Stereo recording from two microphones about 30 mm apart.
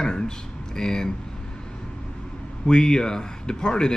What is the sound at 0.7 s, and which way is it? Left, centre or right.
Speech, left.